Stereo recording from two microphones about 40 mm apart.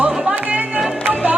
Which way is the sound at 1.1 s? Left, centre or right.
Right.